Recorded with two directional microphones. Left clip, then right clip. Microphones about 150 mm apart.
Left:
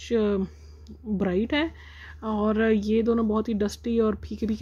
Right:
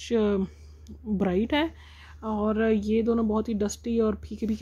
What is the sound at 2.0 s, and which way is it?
Speech, 20° left (ahead or behind).